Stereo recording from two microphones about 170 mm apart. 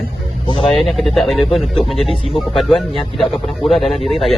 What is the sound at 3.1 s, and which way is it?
A man's voice, centre (ahead or behind).